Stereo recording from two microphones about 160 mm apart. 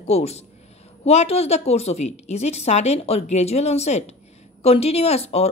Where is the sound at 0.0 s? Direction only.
40° left (ahead or behind).